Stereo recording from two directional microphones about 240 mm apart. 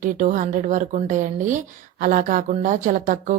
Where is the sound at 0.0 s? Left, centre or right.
Right.